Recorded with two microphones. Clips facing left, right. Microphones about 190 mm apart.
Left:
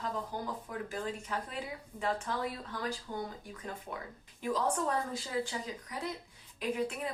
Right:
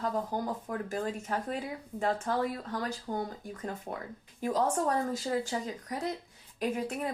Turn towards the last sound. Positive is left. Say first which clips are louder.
# right 2 dB
turn(degrees=-45)  # may be behind; listen again after turning